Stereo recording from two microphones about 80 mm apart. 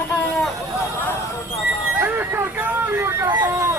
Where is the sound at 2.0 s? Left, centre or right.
Right.